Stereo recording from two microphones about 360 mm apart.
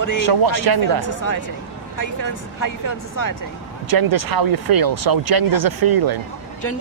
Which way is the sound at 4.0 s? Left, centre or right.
Right.